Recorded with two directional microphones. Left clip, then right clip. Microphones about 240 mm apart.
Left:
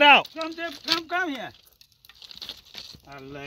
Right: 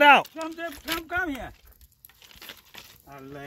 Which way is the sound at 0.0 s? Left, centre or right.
Centre.